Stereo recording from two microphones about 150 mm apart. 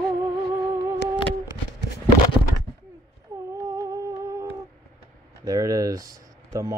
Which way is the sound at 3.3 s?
25° right (ahead or behind).